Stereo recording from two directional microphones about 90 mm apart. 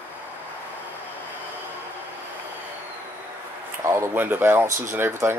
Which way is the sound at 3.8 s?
30° right (ahead or behind).